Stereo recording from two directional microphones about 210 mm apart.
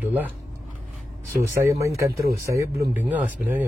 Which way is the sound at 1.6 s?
15° right (ahead or behind).